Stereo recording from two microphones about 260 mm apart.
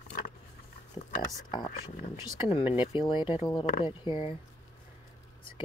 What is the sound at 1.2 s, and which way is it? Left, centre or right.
Speech, centre.